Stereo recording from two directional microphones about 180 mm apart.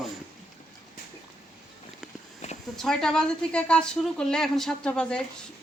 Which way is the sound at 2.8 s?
5° left (ahead or behind).